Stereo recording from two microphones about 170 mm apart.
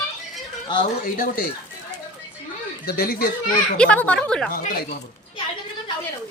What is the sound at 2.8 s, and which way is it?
Speech, 60° left (ahead or behind).